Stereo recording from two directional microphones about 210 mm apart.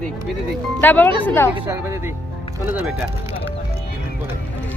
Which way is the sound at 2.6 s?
10° right (ahead or behind).